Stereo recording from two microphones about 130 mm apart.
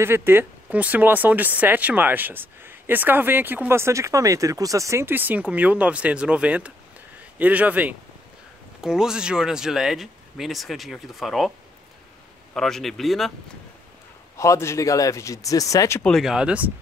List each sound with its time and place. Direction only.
0.0 s speech: 20° right (ahead or behind); by 11.5 s centre (ahead or behind)
12.5 s speech: 5° left (ahead or behind)
14.3 s speech: 25° left (ahead or behind)
16.0 s speech: 5° left (ahead or behind)